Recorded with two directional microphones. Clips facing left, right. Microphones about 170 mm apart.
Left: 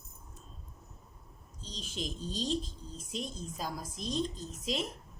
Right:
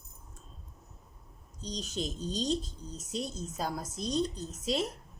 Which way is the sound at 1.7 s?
40° right (ahead or behind).